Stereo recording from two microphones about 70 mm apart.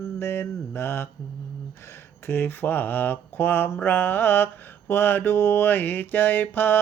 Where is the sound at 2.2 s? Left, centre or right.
Left.